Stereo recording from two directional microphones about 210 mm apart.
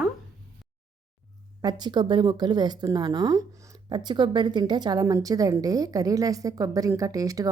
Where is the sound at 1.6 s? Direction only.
20° right (ahead or behind).